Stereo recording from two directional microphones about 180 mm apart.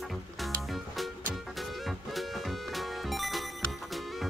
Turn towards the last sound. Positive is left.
turn(degrees=0)  # may be behind; listen again after turning